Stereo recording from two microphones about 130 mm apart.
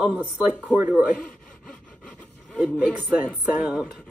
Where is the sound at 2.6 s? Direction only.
10° right (ahead or behind).